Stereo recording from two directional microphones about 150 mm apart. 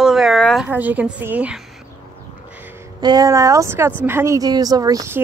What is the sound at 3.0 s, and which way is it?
Speech, 25° right (ahead or behind).